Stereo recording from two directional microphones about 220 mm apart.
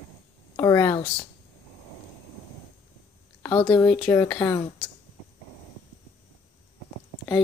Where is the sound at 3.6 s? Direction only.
5° left (ahead or behind).